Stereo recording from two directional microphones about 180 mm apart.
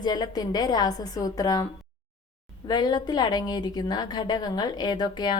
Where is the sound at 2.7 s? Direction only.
20° left (ahead or behind).